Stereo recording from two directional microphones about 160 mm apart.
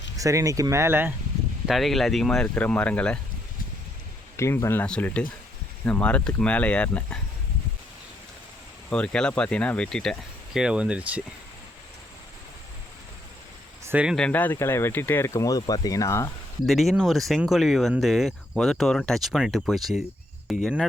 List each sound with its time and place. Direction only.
0.2 s speech: 20° right (ahead or behind)
1.6 s speech: centre (ahead or behind)
4.4 s speech: 15° left (ahead or behind)
8.9 s speech: 5° left (ahead or behind)
13.8 s speech: 10° right (ahead or behind)
14.2 s speech: 10° left (ahead or behind)
16.6 s speech: centre (ahead or behind)